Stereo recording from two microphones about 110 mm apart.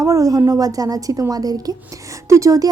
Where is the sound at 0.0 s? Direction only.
30° right (ahead or behind).